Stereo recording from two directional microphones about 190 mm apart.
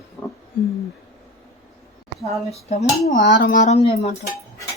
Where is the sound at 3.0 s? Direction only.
50° left (ahead or behind); by 4.1 s 35° left (ahead or behind).